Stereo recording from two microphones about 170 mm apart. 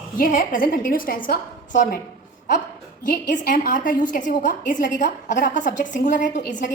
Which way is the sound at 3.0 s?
50° left (ahead or behind).